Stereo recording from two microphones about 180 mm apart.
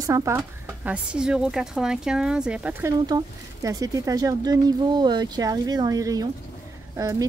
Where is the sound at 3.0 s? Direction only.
20° right (ahead or behind).